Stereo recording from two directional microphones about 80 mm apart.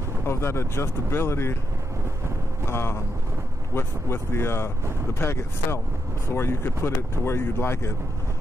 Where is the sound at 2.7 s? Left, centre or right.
Left.